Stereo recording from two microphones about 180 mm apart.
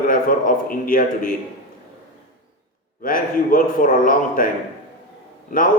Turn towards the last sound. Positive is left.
turn(degrees=50)  # may be behind; listen again after turning